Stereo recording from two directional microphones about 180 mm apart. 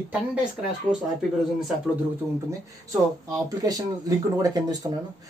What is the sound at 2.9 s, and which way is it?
Speech, 20° right (ahead or behind).